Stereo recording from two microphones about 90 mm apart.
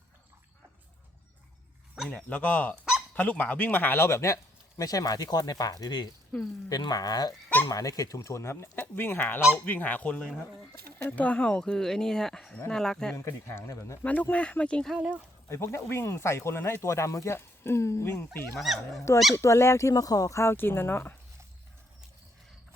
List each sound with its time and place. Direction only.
2.0 s speech: 15° left (ahead or behind); by 4.4 s 30° left (ahead or behind)
4.8 s speech: 40° left (ahead or behind); by 13.1 s 5° left (ahead or behind)
13.1 s speech: 30° left (ahead or behind)
14.0 s speech: 20° left (ahead or behind)
14.9 s speech: 10° right (ahead or behind)
15.4 s speech: 30° left (ahead or behind)
18.6 s speech: centre (ahead or behind)
19.4 s speech: 30° left (ahead or behind)